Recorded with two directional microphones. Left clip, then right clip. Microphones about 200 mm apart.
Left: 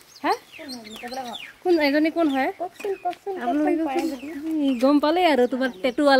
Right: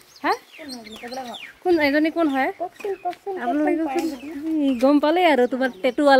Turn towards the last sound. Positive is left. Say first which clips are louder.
# right 2 dB
turn(degrees=0)  # may be behind; listen again after turning